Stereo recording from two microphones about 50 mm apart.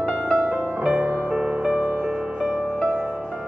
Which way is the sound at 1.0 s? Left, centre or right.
Right.